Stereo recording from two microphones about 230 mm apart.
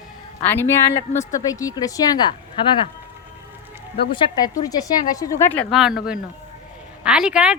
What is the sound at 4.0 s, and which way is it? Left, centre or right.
Speech, left.